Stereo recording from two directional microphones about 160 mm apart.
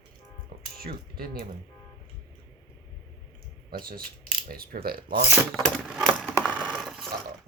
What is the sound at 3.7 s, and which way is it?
Speech, 65° right (ahead or behind).